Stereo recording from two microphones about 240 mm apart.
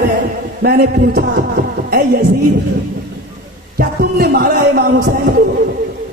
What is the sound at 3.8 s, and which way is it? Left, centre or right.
A man's voice, right.